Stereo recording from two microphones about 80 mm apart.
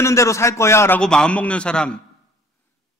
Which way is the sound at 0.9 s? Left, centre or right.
Centre.